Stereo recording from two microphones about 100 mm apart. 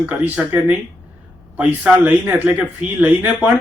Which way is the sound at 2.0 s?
20° right (ahead or behind).